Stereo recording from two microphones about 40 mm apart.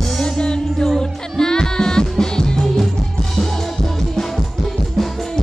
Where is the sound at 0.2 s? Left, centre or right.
Centre.